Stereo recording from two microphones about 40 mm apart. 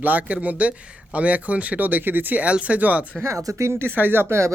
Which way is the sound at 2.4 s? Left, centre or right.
Right.